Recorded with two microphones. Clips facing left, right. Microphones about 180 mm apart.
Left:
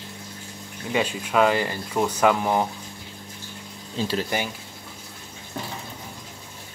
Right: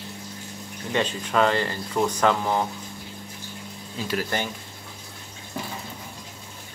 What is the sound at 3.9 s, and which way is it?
Speech, 30° left (ahead or behind).